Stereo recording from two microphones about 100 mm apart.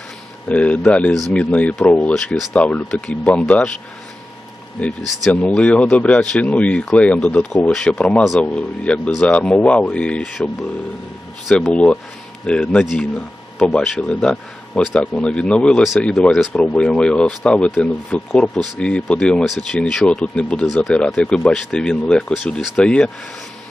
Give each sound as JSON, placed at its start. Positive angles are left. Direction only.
{"t": 0.4, "sound": "speech", "side_deg": 15}
{"t": 4.8, "sound": "speech", "side_deg": 10}
{"t": 11.7, "sound": "speech", "side_deg": 10}